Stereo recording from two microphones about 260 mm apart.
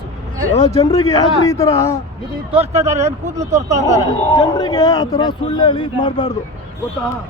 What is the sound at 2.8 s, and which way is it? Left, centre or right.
Speech, right.